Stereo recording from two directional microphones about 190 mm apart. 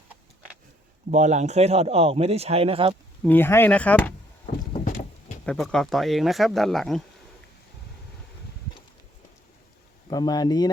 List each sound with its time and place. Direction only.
1.1 s a man's voice: 40° right (ahead or behind)
3.2 s speech: 10° left (ahead or behind)
5.5 s speech: centre (ahead or behind)
10.1 s speech: 20° left (ahead or behind)